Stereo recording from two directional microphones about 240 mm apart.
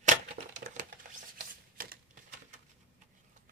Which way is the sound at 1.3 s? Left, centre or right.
Right.